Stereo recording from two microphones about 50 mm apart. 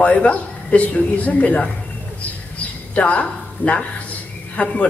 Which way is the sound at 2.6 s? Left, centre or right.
Left.